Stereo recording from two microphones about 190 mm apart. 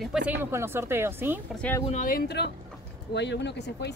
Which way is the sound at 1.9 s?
45° left (ahead or behind).